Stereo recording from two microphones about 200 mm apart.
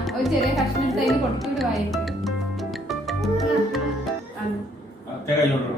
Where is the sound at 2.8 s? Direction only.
Centre (ahead or behind).